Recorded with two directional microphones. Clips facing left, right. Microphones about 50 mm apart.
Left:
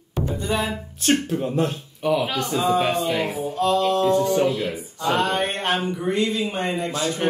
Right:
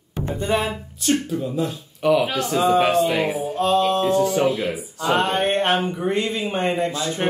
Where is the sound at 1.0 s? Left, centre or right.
Left.